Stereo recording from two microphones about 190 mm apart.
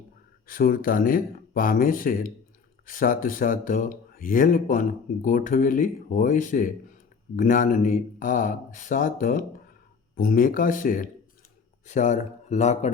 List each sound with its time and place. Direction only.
0.4 s speech: 50° left (ahead or behind)